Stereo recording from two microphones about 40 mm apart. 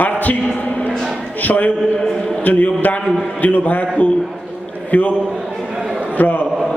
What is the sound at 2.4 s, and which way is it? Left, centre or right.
Speech, left.